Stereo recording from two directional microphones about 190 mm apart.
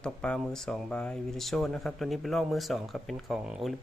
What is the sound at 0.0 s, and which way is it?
Speech, 5° left (ahead or behind).